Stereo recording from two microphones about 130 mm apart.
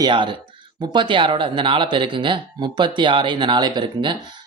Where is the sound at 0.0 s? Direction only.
40° right (ahead or behind).